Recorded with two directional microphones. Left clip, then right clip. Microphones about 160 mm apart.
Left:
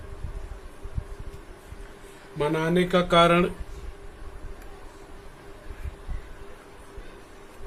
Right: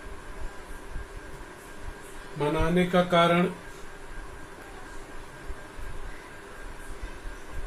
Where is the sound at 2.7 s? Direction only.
55° left (ahead or behind).